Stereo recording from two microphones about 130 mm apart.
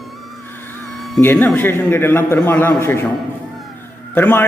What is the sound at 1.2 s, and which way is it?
A man's voice, 15° left (ahead or behind).